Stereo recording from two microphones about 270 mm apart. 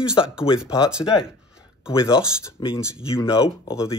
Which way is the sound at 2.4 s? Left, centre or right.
Centre.